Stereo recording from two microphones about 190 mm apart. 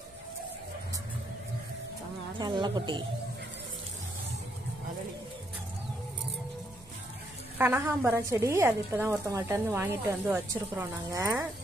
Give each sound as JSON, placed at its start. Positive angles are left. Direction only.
{"t": 2.3, "sound": "speech", "side_deg": -25}
{"t": 7.5, "sound": "a woman's voice", "side_deg": -10}